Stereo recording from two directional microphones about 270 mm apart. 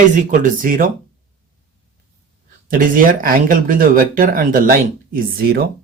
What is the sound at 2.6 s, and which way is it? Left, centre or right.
Speech, right.